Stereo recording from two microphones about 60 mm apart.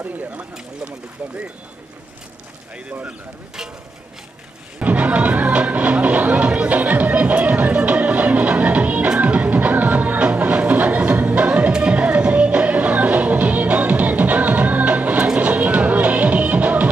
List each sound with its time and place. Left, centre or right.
0.0 s speech: right
4.8 s music: right